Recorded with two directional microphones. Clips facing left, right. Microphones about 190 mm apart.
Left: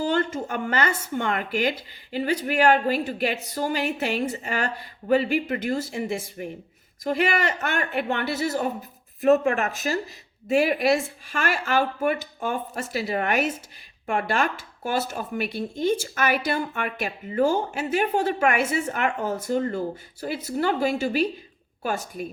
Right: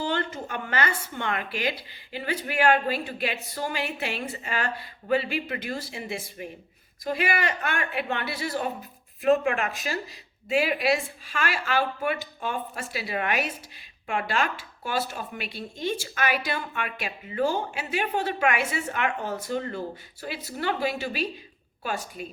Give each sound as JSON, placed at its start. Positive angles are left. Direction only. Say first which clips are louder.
{"t": 0.0, "sound": "speech", "louder": "left 5 dB", "side_deg": 45}
{"t": 7.8, "sound": "speech", "louder": "left 4 dB", "side_deg": 45}